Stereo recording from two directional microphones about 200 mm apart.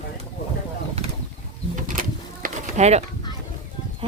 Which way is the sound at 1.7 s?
40° right (ahead or behind).